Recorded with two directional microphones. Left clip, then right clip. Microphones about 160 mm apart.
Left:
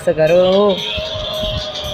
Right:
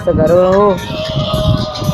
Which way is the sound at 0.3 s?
10° right (ahead or behind).